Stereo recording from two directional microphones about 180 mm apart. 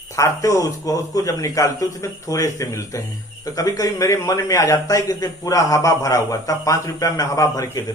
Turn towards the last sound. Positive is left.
turn(degrees=20)  # may be behind; listen again after turning